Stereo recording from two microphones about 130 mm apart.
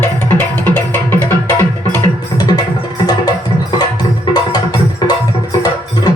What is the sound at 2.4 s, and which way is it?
Music, 30° left (ahead or behind).